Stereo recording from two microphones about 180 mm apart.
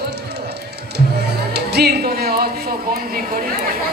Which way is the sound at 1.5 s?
65° right (ahead or behind).